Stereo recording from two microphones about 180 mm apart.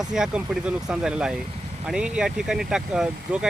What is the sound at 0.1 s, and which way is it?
Speech, 5° right (ahead or behind).